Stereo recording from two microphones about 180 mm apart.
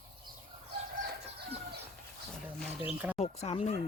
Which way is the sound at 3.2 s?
35° left (ahead or behind).